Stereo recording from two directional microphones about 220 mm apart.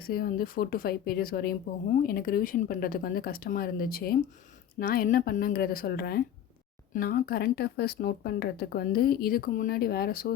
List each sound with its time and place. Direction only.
0.0 s speech: 40° left (ahead or behind)